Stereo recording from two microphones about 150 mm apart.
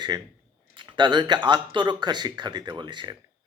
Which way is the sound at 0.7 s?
35° right (ahead or behind).